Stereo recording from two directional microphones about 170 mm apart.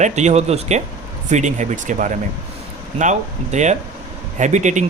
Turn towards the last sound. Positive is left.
turn(degrees=-45)  # may be behind; listen again after turning